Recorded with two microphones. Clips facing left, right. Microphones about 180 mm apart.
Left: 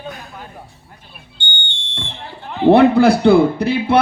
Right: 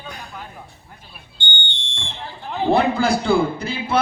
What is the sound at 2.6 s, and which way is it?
Speech, 65° left (ahead or behind).